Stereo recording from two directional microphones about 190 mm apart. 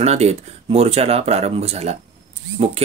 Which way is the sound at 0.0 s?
35° right (ahead or behind).